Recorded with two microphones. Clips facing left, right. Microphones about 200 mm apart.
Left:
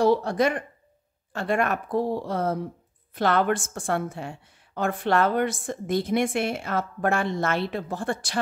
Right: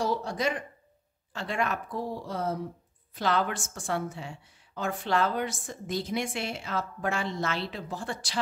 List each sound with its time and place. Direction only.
0.0 s a woman's voice: 60° left (ahead or behind)